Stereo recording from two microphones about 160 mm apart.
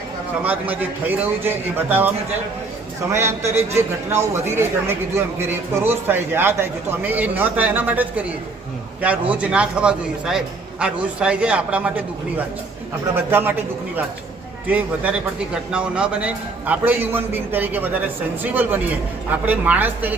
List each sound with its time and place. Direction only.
0.4 s a man's voice: 10° right (ahead or behind)